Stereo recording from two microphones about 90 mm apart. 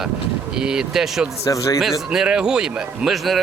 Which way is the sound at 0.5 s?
10° right (ahead or behind).